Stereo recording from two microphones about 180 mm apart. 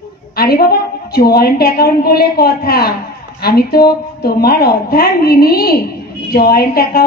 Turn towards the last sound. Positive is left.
turn(degrees=60)  # may be behind; listen again after turning